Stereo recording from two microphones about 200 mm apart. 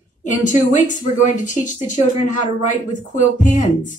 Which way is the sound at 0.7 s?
40° left (ahead or behind).